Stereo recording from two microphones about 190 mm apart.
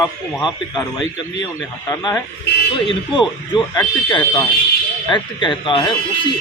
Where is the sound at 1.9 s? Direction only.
15° left (ahead or behind).